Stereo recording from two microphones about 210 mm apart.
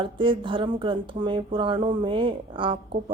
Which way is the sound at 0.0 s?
25° right (ahead or behind).